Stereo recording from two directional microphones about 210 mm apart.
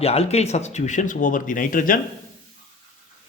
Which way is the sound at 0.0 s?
30° left (ahead or behind).